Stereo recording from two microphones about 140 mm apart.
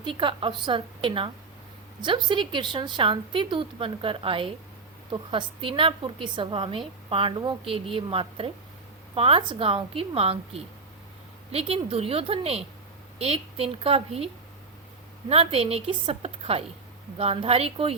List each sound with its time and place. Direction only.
0.0 s a woman's voice: 35° right (ahead or behind)
15.3 s a woman's voice: 45° right (ahead or behind)